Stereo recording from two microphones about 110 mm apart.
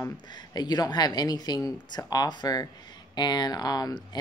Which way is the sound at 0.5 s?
40° left (ahead or behind).